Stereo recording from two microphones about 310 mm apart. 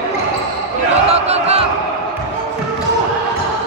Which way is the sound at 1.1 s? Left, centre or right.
Centre.